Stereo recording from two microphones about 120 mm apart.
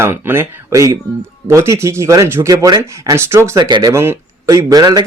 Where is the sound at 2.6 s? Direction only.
30° right (ahead or behind).